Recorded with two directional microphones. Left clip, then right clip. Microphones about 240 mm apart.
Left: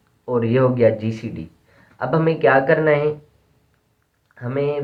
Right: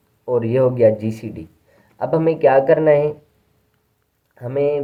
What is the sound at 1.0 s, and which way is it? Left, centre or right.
Speech, right.